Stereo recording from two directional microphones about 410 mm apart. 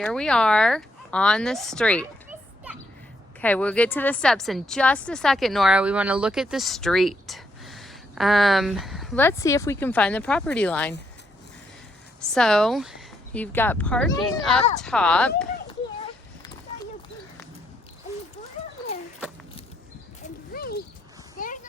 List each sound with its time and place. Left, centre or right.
0.0 s a woman's voice: centre
3.4 s a woman's voice: centre
12.3 s a woman's voice: centre
20.5 s a sound: left